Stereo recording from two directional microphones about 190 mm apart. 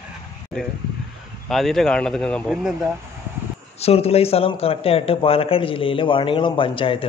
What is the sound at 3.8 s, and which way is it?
A man's voice, 30° left (ahead or behind).